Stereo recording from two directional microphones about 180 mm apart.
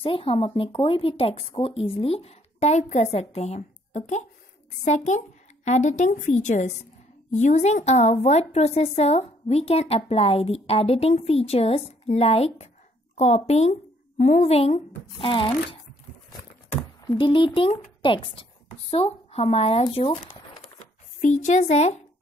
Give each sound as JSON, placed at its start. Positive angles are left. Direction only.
{"t": 0.0, "sound": "a woman's voice", "side_deg": 30}
{"t": 13.1, "sound": "a sound", "side_deg": 35}
{"t": 14.2, "sound": "a woman's voice", "side_deg": 40}
{"t": 17.2, "sound": "speech", "side_deg": 30}
{"t": 21.2, "sound": "a woman's voice", "side_deg": 40}